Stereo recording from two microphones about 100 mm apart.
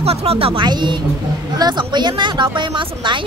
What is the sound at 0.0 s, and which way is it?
Speech, 90° right.